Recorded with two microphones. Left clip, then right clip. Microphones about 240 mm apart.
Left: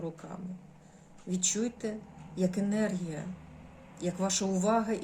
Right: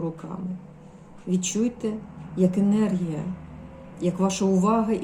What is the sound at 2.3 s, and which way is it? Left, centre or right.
Speech, centre.